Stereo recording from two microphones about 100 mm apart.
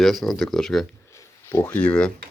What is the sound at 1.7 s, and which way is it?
Speech, 15° left (ahead or behind).